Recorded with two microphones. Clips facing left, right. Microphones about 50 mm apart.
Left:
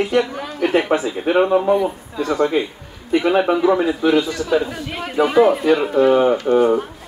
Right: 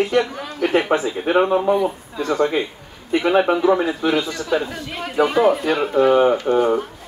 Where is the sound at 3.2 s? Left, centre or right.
Centre.